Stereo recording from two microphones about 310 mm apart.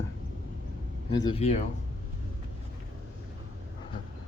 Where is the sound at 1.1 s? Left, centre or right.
Centre.